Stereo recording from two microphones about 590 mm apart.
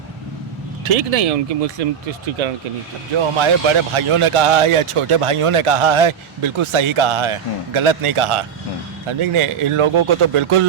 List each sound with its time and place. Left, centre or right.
0.9 s speech: right
3.2 s a man's voice: right